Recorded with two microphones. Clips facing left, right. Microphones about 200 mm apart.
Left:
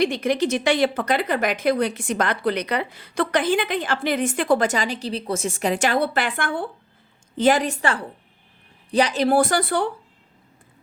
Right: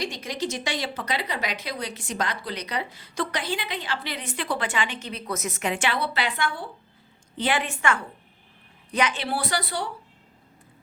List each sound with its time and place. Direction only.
0.0 s a woman's voice: 55° left (ahead or behind)